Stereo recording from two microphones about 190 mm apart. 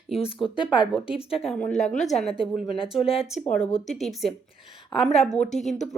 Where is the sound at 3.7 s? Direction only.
Centre (ahead or behind).